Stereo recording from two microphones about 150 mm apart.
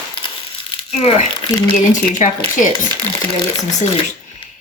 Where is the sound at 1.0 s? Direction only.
45° left (ahead or behind).